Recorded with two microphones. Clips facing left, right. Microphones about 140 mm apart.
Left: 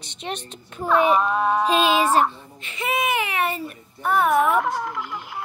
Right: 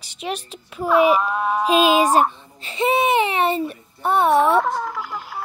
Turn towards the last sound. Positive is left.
turn(degrees=-45)  # may be behind; listen again after turning